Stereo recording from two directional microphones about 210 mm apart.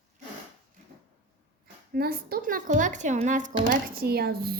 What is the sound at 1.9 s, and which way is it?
A woman's voice, 45° right (ahead or behind).